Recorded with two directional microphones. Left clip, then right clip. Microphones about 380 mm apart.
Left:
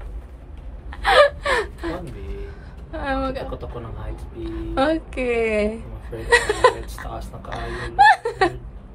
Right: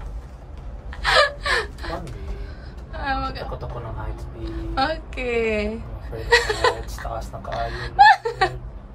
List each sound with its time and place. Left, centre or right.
1.0 s gasp: centre
2.9 s vehicle: centre
4.5 s a woman's voice: centre